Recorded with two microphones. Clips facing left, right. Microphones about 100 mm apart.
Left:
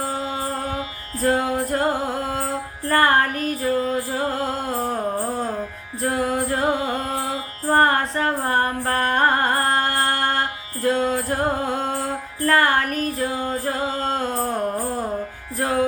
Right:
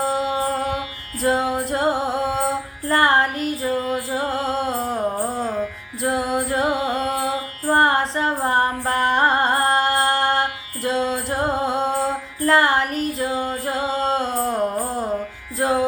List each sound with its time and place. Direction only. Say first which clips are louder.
0.0 s music: right 5 dB; 20° right (ahead or behind)
3.8 s music: left 1 dB; 35° left (ahead or behind)
4.1 s music: right 1 dB; 25° right (ahead or behind)
6.0 s music: right 1 dB; 25° right (ahead or behind)
12.5 s a sound: right 1 dB; 25° right (ahead or behind)
13.7 s music: right 4 dB; 25° right (ahead or behind)
15.5 s music: right 3 dB; 25° right (ahead or behind)